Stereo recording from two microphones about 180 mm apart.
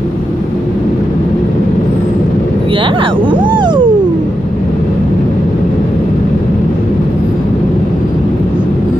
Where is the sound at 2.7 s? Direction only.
30° right (ahead or behind).